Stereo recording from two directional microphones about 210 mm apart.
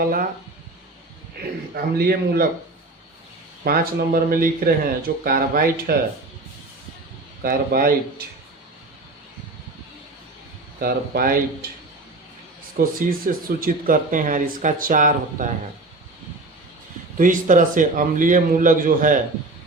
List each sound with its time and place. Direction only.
1.7 s speech: 45° right (ahead or behind)
3.6 s speech: 45° right (ahead or behind)
7.4 s speech: 45° right (ahead or behind)
10.8 s speech: 45° right (ahead or behind)
12.7 s speech: 45° right (ahead or behind)
17.2 s speech: 40° right (ahead or behind)